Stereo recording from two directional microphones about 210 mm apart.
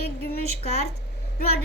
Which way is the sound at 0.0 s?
45° left (ahead or behind).